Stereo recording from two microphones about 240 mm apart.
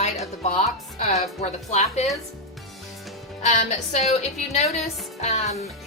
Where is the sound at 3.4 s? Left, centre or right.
Left.